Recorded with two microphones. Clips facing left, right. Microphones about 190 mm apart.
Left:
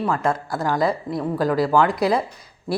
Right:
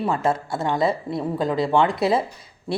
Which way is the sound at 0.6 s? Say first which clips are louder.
Even; 25° right (ahead or behind).